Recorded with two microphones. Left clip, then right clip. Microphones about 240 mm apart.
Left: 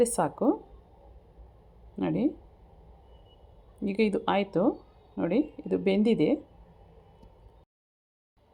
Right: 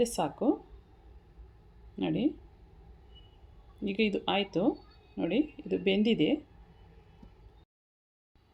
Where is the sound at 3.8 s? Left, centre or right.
Left.